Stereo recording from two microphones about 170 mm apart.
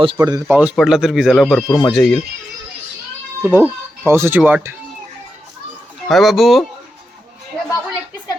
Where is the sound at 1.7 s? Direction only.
25° left (ahead or behind).